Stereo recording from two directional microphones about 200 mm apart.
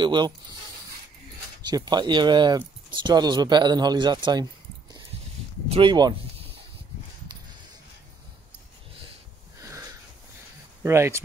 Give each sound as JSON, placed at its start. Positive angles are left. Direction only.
{"t": 0.0, "sound": "speech", "side_deg": -20}
{"t": 1.6, "sound": "speech", "side_deg": -20}
{"t": 5.7, "sound": "speech", "side_deg": -25}
{"t": 9.6, "sound": "a sound", "side_deg": -15}
{"t": 10.8, "sound": "speech", "side_deg": -15}